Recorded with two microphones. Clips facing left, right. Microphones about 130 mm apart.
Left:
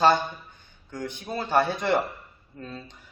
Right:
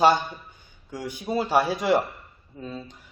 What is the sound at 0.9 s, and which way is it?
A man's voice, 10° right (ahead or behind).